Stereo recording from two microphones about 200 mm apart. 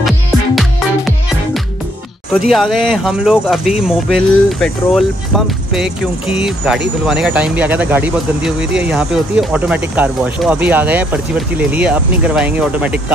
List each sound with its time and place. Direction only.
2.4 s speech: centre (ahead or behind)